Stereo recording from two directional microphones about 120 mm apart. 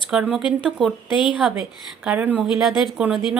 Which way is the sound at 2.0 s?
15° right (ahead or behind).